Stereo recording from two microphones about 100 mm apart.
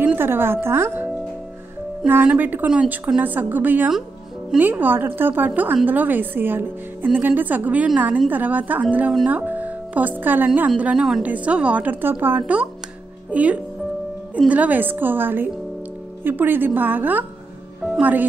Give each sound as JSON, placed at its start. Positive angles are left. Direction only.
{"t": 0.0, "sound": "speech", "side_deg": -20}
{"t": 2.0, "sound": "a woman's voice", "side_deg": -20}
{"t": 10.8, "sound": "a woman's voice", "side_deg": -10}